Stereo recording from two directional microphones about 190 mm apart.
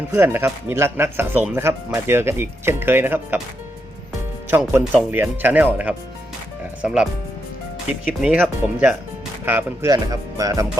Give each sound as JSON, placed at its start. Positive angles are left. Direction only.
{"t": 0.1, "sound": "speech", "side_deg": -15}
{"t": 4.5, "sound": "speech", "side_deg": -10}